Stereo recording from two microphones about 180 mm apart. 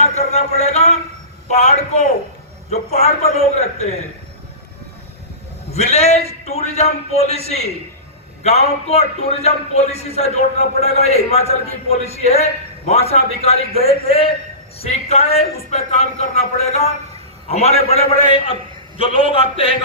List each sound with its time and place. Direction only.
0.0 s a sound: 35° left (ahead or behind)
1.5 s a man's voice: 40° left (ahead or behind)
5.7 s a man's voice: 35° left (ahead or behind)